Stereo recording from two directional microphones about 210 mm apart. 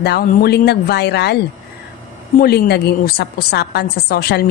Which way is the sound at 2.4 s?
50° left (ahead or behind).